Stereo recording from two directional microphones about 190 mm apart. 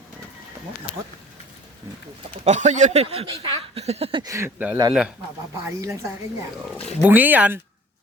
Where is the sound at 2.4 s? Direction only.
40° right (ahead or behind); by 7.6 s 10° right (ahead or behind).